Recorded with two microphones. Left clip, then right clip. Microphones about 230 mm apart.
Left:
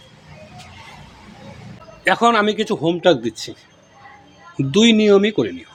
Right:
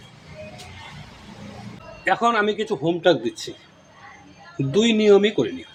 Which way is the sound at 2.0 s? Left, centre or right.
Left.